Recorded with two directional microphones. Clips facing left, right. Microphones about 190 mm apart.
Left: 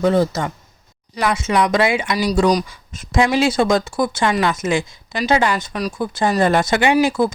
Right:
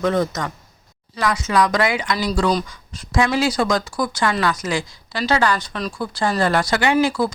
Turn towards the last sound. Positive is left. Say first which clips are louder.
# left 2 dB
turn(degrees=20)  # may be behind; listen again after turning